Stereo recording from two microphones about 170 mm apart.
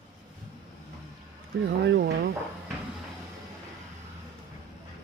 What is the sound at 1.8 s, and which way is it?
Speech, 85° right.